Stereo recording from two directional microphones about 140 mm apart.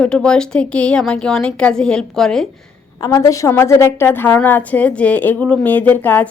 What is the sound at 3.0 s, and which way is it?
A woman's voice, 25° left (ahead or behind).